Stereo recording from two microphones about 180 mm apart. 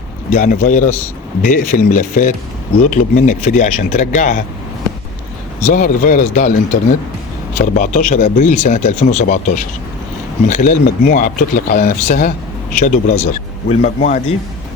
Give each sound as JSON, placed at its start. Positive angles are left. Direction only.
{"t": 0.3, "sound": "speech", "side_deg": 45}
{"t": 5.6, "sound": "speech", "side_deg": 50}
{"t": 7.6, "sound": "a man's voice", "side_deg": 45}